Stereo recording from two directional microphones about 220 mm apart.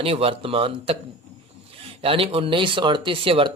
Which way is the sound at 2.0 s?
25° right (ahead or behind).